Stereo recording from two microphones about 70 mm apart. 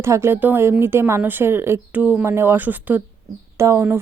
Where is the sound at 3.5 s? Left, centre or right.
Right.